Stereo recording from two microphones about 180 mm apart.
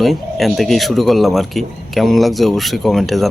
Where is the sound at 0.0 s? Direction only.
Centre (ahead or behind).